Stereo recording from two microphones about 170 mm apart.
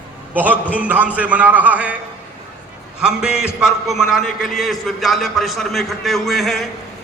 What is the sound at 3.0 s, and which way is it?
A man's voice, 5° right (ahead or behind).